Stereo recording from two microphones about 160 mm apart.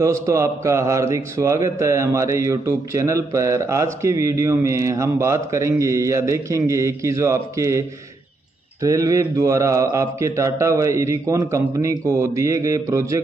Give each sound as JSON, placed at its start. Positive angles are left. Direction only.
{"t": 0.0, "sound": "a man's voice", "side_deg": -20}
{"t": 8.8, "sound": "a man's voice", "side_deg": -20}